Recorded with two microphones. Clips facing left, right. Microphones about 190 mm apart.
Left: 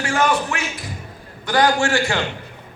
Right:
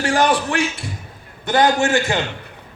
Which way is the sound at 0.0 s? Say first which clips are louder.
Right 2 dB; 35° right (ahead or behind).